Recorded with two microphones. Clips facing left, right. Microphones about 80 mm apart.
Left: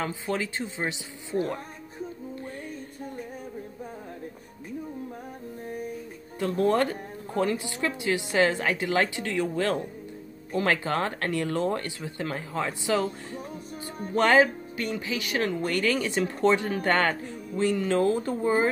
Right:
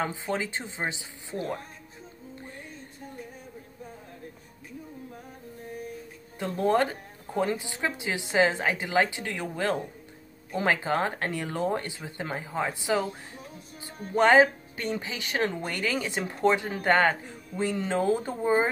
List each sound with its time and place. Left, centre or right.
0.0 s a woman's voice: right
6.4 s a woman's voice: centre
14.4 s speech: right
15.6 s a woman's voice: centre